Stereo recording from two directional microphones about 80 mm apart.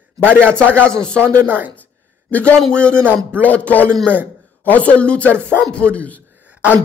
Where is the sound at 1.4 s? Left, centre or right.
Right.